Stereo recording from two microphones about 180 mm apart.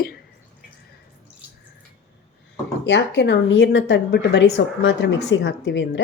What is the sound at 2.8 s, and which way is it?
A woman's voice, 75° left (ahead or behind).